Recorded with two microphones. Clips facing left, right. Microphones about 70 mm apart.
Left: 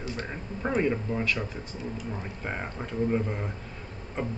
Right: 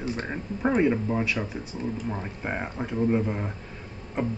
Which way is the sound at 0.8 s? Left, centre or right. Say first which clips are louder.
Right 3 dB; centre.